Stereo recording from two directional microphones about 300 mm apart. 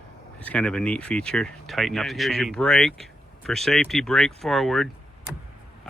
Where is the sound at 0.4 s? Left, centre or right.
Centre.